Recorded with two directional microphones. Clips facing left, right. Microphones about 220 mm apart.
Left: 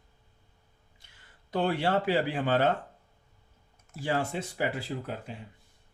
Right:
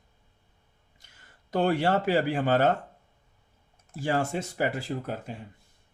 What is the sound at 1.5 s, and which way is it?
Speech, 45° right (ahead or behind).